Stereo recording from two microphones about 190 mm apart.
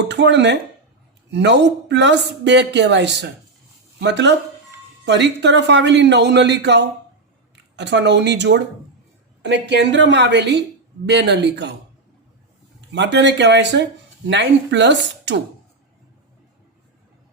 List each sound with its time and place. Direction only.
0.0 s a man's voice: 65° right (ahead or behind)
12.9 s speech: 65° right (ahead or behind)